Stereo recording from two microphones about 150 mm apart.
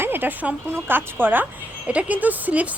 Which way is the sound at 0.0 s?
15° right (ahead or behind).